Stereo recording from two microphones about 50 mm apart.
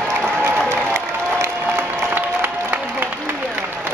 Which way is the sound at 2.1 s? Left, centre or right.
Right.